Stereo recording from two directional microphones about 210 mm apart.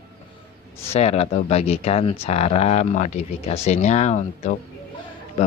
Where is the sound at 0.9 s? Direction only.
30° left (ahead or behind).